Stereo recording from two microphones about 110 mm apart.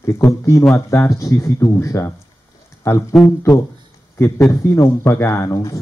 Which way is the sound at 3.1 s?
5° left (ahead or behind).